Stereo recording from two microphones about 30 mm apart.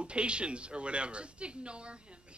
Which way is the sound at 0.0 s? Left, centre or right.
Right.